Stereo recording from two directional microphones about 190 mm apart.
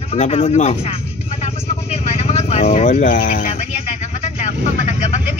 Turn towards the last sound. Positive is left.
turn(degrees=35)  # may be behind; listen again after turning